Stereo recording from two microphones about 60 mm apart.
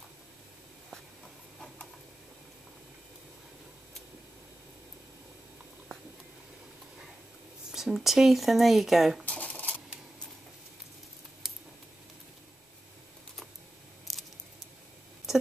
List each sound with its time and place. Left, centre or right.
7.7 s speech: centre
9.2 s dishes: left
11.4 s scissors: centre
14.1 s a sound: centre